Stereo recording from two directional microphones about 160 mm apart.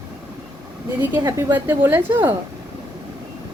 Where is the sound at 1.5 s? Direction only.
15° right (ahead or behind).